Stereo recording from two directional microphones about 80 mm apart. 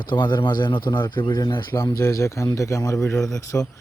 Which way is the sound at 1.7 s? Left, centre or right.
Left.